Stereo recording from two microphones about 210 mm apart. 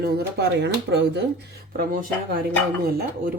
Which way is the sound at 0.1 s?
50° right (ahead or behind).